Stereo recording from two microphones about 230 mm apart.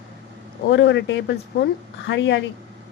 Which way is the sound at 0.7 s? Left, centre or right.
Left.